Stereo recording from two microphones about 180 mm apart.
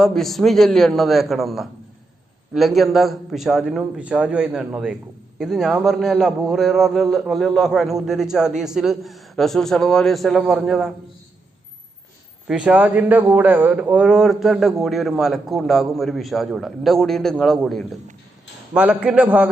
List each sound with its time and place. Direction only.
0.0 s a man's voice: centre (ahead or behind)
12.5 s a man's voice: 5° right (ahead or behind)